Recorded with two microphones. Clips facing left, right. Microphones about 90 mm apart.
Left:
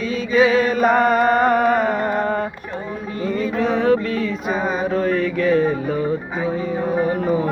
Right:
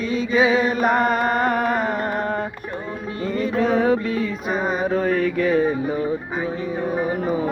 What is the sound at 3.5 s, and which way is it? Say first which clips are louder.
Music: left 1 dB; 35° right (ahead or behind).